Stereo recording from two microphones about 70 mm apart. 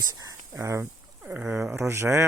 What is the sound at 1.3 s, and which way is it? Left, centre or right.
Speech, centre.